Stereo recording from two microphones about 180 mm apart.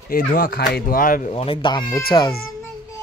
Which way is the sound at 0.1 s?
55° left (ahead or behind).